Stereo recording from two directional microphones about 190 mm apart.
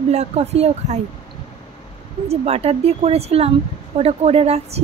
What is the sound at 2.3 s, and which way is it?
A woman's voice, 35° right (ahead or behind).